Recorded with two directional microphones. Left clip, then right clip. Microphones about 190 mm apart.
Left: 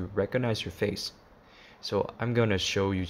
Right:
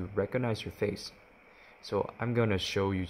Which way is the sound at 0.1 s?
Centre (ahead or behind).